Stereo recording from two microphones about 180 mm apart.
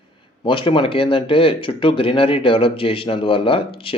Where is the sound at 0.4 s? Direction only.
30° left (ahead or behind).